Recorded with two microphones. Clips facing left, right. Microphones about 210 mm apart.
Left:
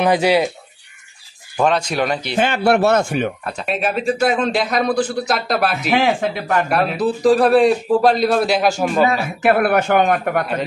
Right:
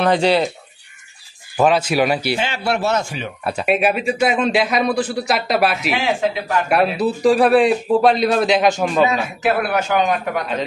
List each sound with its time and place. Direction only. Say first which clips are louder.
0.0 s speech: left 1 dB; 10° left (ahead or behind)
1.6 s a man's voice: right 2 dB; 5° right (ahead or behind)
2.3 s a man's voice: left 5 dB; 55° left (ahead or behind)
3.4 s a man's voice: right 4 dB; 10° right (ahead or behind)
5.9 s a man's voice: left 2 dB; 55° left (ahead or behind)
6.7 s a man's voice: right 5 dB; 5° right (ahead or behind)
9.4 s a man's voice: left 5 dB; 55° left (ahead or behind)